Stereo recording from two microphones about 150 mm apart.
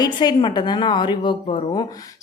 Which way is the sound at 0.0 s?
30° left (ahead or behind).